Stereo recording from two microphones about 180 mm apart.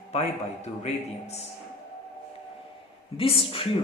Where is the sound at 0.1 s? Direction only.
35° left (ahead or behind).